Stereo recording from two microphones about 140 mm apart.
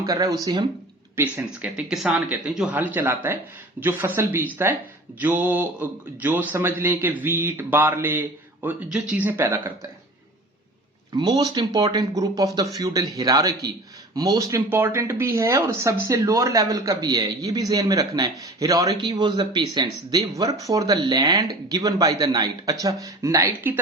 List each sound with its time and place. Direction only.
0.0 s speech: 25° right (ahead or behind)
1.1 s speech: 10° right (ahead or behind)
11.1 s speech: 30° right (ahead or behind)